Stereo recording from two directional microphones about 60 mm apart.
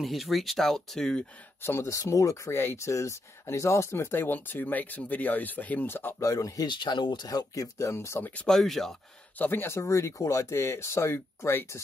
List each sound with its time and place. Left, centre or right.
0.0 s speech: centre
1.6 s speech: left
1.9 s speech: left
2.5 s speech: left
5.9 s speech: left
6.1 s speech: left
7.2 s speech: left
8.5 s speech: centre
9.4 s speech: left
9.8 s speech: left
10.6 s speech: left